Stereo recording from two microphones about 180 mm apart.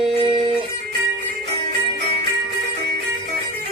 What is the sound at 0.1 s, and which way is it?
Music, 30° right (ahead or behind).